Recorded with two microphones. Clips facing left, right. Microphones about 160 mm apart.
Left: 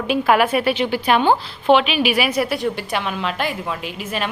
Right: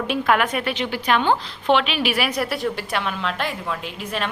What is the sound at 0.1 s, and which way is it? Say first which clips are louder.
A woman's voice: left 5 dB; 10° left (ahead or behind).